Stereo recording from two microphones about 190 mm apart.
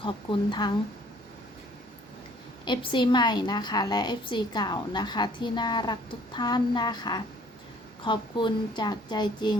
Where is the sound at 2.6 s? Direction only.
25° left (ahead or behind).